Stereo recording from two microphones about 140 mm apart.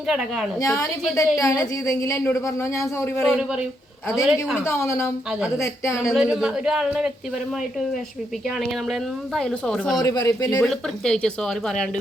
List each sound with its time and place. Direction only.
0.6 s speech: 20° left (ahead or behind)
3.2 s speech: 5° right (ahead or behind)
4.6 s speech: 20° left (ahead or behind)
6.1 s speech: 5° right (ahead or behind)
8.4 s speech: centre (ahead or behind)
10.0 s speech: 25° left (ahead or behind)
10.6 s speech: 5° left (ahead or behind)